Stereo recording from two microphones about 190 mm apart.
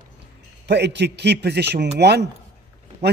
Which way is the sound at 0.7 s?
60° right (ahead or behind).